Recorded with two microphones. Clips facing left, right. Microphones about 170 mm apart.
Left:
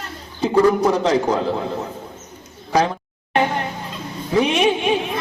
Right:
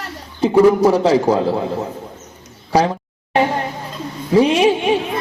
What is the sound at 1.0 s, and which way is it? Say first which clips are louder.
Speech: right 4 dB; 10° right (ahead or behind).